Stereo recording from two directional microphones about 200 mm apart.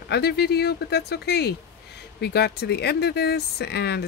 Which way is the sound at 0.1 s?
55° left (ahead or behind).